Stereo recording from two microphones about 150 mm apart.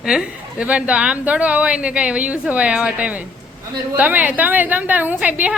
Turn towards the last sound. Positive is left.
turn(degrees=-10)  # may be behind; listen again after turning